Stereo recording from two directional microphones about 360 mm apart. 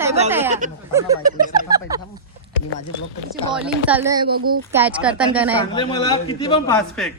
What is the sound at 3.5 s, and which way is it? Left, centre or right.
A woman's voice, centre.